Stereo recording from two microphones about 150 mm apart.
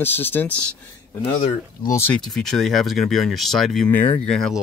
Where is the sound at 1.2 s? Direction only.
45° left (ahead or behind).